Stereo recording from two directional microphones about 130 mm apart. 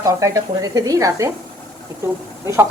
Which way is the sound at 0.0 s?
25° right (ahead or behind).